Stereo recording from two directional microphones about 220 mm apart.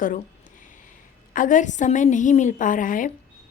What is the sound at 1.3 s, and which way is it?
A woman's voice, 35° left (ahead or behind).